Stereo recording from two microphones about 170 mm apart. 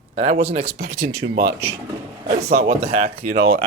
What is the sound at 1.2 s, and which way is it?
Speech, 60° right (ahead or behind).